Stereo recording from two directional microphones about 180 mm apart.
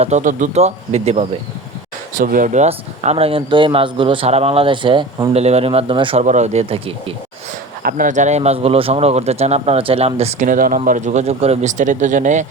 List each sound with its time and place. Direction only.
0.0 s speech: 40° right (ahead or behind)
2.1 s speech: 50° right (ahead or behind); by 6.2 s 30° right (ahead or behind)
6.2 s speech: 40° right (ahead or behind)
7.8 s speech: 50° right (ahead or behind)